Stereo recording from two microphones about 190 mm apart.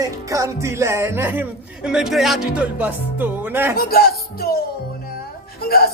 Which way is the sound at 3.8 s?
50° left (ahead or behind).